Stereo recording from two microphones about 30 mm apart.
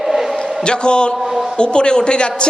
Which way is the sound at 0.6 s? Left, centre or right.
Left.